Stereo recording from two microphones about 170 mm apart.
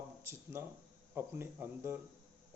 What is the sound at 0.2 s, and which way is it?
Speech, 15° right (ahead or behind).